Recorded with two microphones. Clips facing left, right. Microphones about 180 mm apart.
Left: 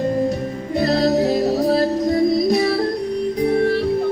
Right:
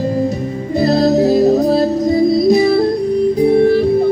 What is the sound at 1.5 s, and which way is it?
Music, 25° right (ahead or behind).